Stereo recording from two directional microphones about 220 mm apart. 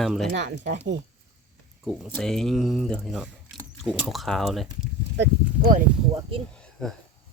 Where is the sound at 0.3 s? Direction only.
55° right (ahead or behind).